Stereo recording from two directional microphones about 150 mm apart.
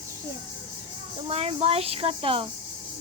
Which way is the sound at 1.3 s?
40° right (ahead or behind).